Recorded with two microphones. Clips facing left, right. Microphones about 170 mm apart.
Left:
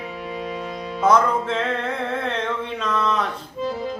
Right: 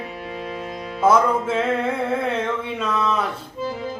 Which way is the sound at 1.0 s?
5° right (ahead or behind).